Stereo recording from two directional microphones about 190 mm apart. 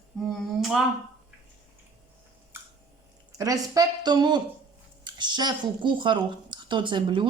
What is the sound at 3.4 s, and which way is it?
A woman's voice, 20° right (ahead or behind).